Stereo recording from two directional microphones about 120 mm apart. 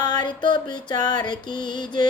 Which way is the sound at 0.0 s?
35° left (ahead or behind).